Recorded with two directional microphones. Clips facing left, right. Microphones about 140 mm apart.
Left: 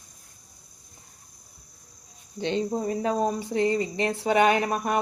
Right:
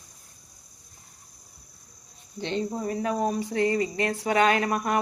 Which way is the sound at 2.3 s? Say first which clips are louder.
Left 3 dB; 20° left (ahead or behind).